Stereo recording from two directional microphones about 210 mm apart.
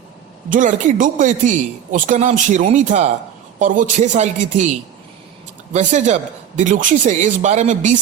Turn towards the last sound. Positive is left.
turn(degrees=-35)  # may be behind; listen again after turning